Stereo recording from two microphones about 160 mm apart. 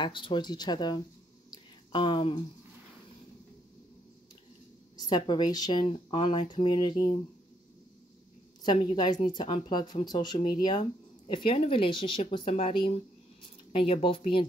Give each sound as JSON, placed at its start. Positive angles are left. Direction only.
{"t": 0.0, "sound": "speech", "side_deg": 30}
{"t": 1.5, "sound": "a sound", "side_deg": 30}
{"t": 4.9, "sound": "speech", "side_deg": 25}
{"t": 8.6, "sound": "speech", "side_deg": 25}